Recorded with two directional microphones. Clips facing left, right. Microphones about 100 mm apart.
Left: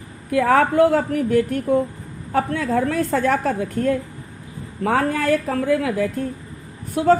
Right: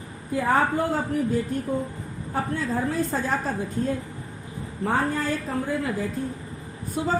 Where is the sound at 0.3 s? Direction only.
75° left (ahead or behind).